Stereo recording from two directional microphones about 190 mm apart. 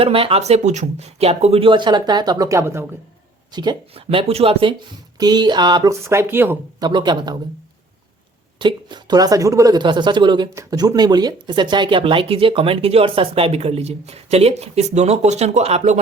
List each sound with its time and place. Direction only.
0.0 s speech: 30° right (ahead or behind); by 6.8 s 10° right (ahead or behind)
6.8 s speech: 25° right (ahead or behind)
8.5 s speech: 25° right (ahead or behind)